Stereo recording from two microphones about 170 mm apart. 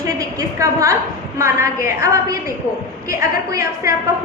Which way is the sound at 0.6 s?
20° right (ahead or behind).